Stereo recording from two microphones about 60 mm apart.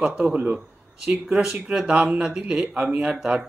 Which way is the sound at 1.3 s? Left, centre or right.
Centre.